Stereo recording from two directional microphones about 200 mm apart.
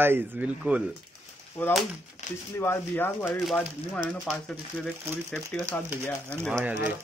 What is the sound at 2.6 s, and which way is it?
Speech, 10° left (ahead or behind).